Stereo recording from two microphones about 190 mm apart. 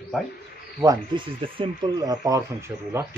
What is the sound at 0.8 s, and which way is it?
Speech, 20° right (ahead or behind).